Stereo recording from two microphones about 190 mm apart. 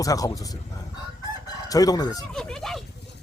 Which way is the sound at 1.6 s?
20° left (ahead or behind).